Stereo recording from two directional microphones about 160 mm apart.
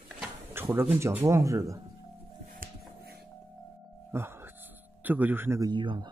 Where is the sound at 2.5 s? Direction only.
70° right (ahead or behind).